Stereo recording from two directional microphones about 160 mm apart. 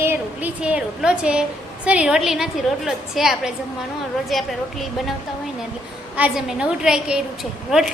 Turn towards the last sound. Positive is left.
turn(degrees=-5)  # may be behind; listen again after turning